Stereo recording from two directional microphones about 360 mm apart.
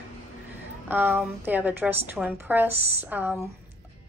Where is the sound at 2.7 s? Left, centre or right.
Centre.